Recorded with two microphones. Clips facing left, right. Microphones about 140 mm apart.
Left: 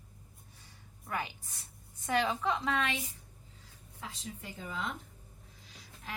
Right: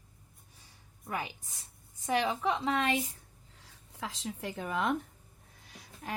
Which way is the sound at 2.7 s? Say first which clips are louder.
Right 3 dB; 35° right (ahead or behind).